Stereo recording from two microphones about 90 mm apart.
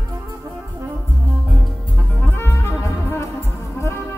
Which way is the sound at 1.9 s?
25° left (ahead or behind).